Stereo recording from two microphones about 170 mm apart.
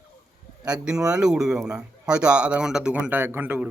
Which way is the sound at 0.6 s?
5° right (ahead or behind).